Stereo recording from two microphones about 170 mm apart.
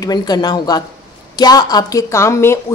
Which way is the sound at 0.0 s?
25° left (ahead or behind).